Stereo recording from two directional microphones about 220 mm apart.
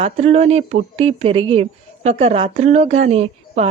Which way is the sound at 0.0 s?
30° right (ahead or behind).